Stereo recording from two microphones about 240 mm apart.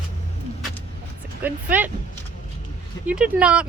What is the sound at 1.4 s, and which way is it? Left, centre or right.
Speech, centre.